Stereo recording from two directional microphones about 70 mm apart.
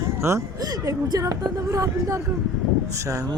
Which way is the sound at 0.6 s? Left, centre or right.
Right.